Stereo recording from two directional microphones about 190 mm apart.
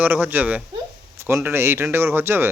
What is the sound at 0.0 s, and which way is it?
Speech, 10° right (ahead or behind).